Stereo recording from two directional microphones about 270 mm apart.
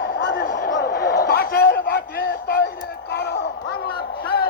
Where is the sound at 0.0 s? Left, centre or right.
Left.